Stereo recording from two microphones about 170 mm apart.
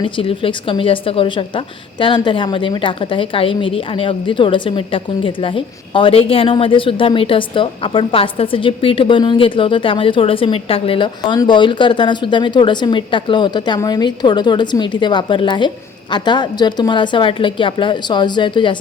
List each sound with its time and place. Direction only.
0.0 s a woman's voice: 30° left (ahead or behind)